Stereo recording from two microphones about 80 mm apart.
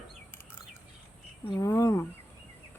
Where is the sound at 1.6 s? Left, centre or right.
Left.